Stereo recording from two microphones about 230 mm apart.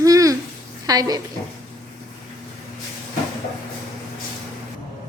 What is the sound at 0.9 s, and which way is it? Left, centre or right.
Speech, centre.